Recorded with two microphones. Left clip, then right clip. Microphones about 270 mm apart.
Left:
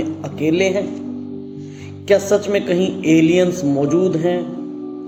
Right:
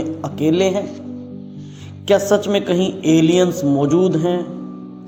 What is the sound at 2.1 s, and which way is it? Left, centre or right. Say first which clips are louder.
Speech: even; right.